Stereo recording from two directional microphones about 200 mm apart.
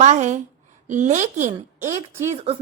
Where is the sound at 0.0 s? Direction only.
35° right (ahead or behind).